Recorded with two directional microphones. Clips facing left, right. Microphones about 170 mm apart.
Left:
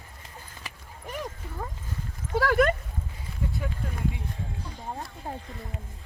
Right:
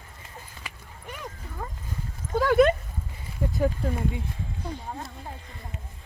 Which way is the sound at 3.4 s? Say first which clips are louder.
Right 3 dB; 40° right (ahead or behind).